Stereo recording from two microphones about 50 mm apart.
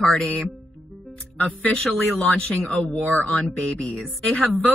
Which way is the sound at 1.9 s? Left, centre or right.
Centre.